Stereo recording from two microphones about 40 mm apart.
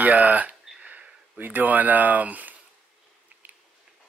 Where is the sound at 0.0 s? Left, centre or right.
Right.